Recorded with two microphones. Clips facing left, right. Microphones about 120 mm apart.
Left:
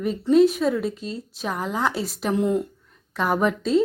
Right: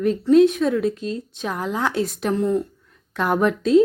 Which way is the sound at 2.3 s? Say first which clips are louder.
Even; 15° left (ahead or behind).